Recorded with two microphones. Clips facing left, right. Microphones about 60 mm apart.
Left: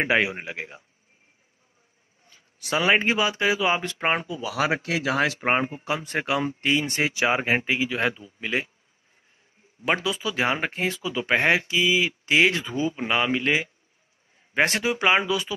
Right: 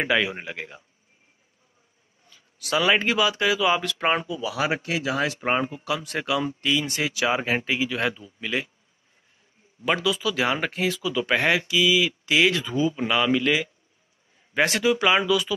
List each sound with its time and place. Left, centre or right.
0.0 s speech: left
2.2 s speech: left
5.4 s speech: left
9.8 s speech: left